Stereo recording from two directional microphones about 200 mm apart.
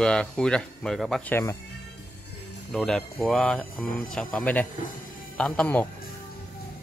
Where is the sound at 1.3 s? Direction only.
15° left (ahead or behind).